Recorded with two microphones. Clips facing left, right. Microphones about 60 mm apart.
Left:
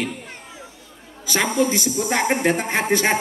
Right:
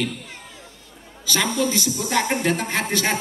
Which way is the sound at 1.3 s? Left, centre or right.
Left.